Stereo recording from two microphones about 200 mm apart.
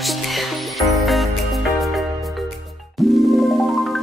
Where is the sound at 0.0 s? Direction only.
Centre (ahead or behind).